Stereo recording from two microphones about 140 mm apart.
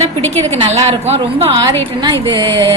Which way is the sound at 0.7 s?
50° right (ahead or behind).